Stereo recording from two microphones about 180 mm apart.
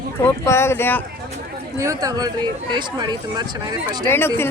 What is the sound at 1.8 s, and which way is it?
Speech, 20° right (ahead or behind).